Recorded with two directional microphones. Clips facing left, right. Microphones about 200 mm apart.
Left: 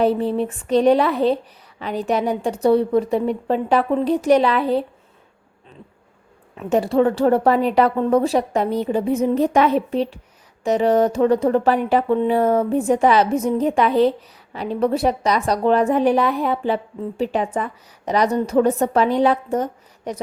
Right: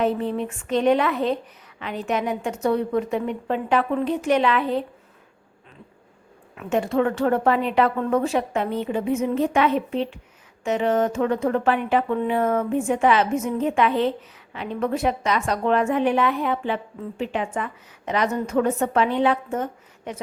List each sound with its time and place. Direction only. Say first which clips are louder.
0.0 s a woman's voice: left 4 dB; 35° left (ahead or behind)
6.6 s a woman's voice: left 4 dB; 35° left (ahead or behind)